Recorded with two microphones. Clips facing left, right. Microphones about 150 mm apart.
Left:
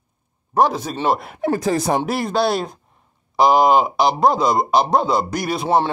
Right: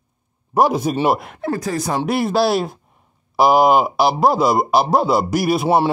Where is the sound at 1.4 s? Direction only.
25° left (ahead or behind).